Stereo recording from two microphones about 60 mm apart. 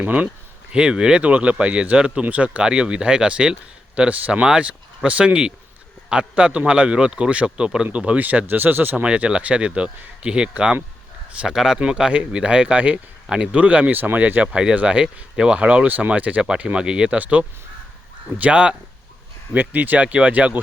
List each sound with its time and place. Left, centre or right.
0.0 s speech: right
0.7 s a man's voice: centre; by 9.0 s right
9.0 s a man's voice: centre
14.5 s a man's voice: centre
19.5 s speech: right